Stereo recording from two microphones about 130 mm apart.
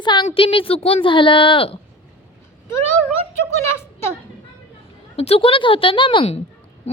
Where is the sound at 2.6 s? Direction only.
15° left (ahead or behind).